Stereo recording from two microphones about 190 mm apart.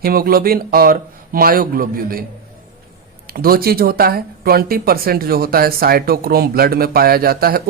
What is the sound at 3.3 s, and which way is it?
Speech, 50° right (ahead or behind).